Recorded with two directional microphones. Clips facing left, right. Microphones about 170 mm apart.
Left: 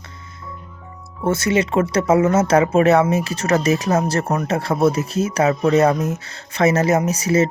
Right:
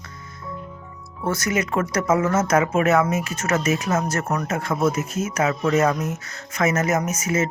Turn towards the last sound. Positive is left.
turn(degrees=35)  # may be behind; listen again after turning